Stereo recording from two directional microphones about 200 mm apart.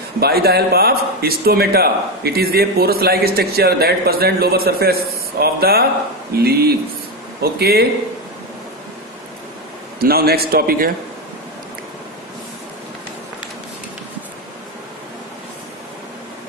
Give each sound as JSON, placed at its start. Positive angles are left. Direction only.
{"t": 0.2, "sound": "speech", "side_deg": -50}
{"t": 9.9, "sound": "speech", "side_deg": -50}